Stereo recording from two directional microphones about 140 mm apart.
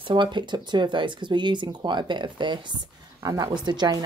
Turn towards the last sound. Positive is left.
turn(degrees=-30)  # may be behind; listen again after turning